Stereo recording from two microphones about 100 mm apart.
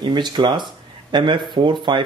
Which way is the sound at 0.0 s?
45° right (ahead or behind).